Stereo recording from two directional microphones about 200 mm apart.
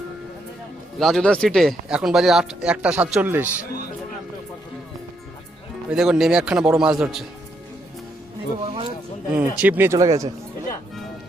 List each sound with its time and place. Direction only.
0.9 s speech: centre (ahead or behind)
5.9 s speech: centre (ahead or behind)
8.6 s a sound: 25° right (ahead or behind)
9.3 s speech: 10° right (ahead or behind)